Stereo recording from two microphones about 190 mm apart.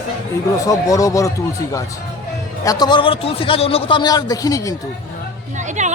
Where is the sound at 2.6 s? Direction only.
20° left (ahead or behind).